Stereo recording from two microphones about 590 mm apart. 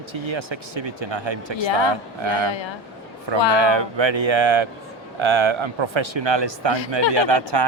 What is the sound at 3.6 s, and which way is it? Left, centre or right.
Speech, right.